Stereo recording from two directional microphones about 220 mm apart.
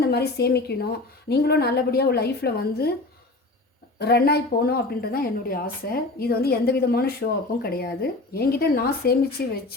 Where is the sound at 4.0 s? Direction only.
45° left (ahead or behind).